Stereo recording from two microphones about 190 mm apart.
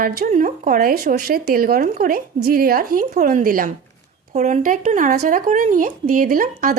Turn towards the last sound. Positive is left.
turn(degrees=-50)  # may be behind; listen again after turning